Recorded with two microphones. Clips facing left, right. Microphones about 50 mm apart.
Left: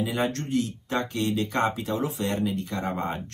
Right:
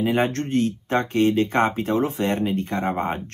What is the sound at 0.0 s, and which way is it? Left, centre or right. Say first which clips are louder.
Speech: right 5 dB; right.